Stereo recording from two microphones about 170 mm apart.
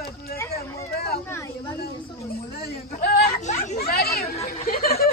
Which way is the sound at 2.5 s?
65° left (ahead or behind).